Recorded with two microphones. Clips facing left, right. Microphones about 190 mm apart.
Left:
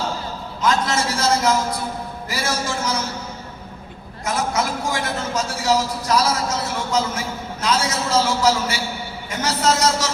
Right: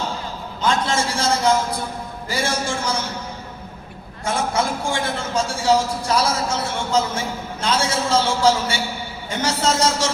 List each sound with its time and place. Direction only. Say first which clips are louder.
0.6 s a sound: even; 30° right (ahead or behind)
2.3 s a man's voice: right 2 dB; 30° right (ahead or behind)
4.3 s a man's voice: right 1 dB; 30° right (ahead or behind)